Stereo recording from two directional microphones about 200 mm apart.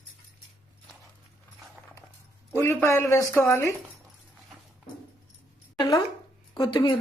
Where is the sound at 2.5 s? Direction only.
10° left (ahead or behind).